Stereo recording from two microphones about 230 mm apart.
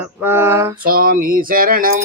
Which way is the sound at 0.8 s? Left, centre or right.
Right.